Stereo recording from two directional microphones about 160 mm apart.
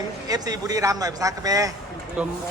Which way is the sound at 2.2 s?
10° right (ahead or behind).